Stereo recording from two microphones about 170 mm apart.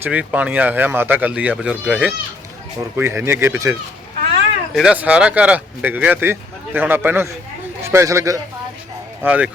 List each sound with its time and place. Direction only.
0.0 s speech: 10° right (ahead or behind)
4.7 s a man's voice: 5° right (ahead or behind)
9.2 s speech: 10° right (ahead or behind)